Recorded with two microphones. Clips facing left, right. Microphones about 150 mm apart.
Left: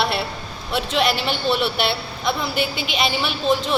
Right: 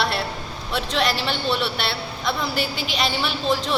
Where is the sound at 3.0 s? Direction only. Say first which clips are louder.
Left 2 dB; 5° left (ahead or behind).